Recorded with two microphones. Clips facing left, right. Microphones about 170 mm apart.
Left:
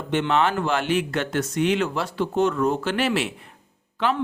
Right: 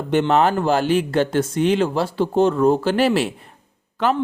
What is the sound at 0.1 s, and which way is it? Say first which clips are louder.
Speech: right 5 dB; 40° right (ahead or behind).